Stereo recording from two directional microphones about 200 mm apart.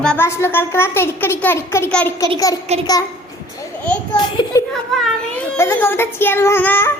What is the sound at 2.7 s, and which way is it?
Speech, 30° right (ahead or behind).